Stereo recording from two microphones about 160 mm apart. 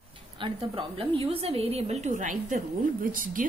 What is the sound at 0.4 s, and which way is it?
A woman's voice, 35° right (ahead or behind).